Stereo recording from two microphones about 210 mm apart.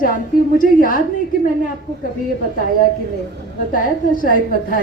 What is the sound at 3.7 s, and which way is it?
A woman's voice, 40° left (ahead or behind).